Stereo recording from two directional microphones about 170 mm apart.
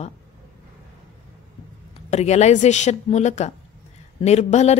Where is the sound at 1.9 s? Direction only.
40° left (ahead or behind).